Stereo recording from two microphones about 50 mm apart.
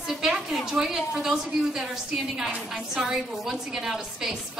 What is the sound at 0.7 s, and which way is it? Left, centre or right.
A woman's voice, centre.